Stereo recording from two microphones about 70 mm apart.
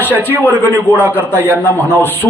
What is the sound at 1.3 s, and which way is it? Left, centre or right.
A man's voice, left.